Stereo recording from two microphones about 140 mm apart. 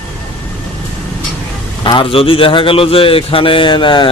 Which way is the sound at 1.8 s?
35° left (ahead or behind).